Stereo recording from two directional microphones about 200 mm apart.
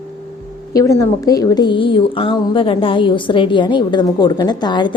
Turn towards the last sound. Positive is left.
turn(degrees=20)  # may be behind; listen again after turning